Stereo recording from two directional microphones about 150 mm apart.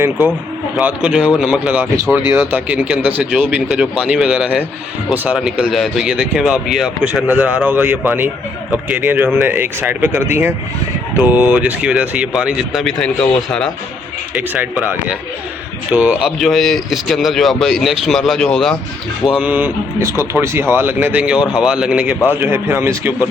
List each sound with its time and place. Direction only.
0.8 s speech: 10° right (ahead or behind)
14.3 s speech: 10° right (ahead or behind)
19.4 s speech: 10° right (ahead or behind)